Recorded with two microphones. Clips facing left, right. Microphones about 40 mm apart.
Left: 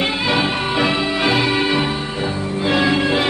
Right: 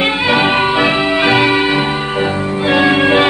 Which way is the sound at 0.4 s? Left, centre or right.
Right.